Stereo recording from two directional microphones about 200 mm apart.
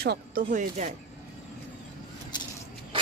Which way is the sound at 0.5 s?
40° right (ahead or behind).